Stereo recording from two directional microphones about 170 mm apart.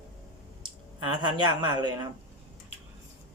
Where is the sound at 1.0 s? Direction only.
25° right (ahead or behind).